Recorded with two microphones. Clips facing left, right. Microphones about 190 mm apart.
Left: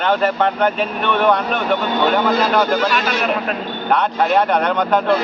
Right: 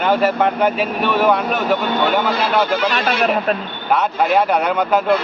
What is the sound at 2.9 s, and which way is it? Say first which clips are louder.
Speech: right 2 dB; 40° right (ahead or behind).